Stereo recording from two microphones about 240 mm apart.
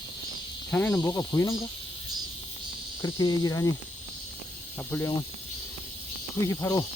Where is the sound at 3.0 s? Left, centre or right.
Centre.